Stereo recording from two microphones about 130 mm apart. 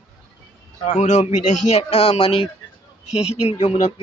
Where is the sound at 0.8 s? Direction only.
60° left (ahead or behind).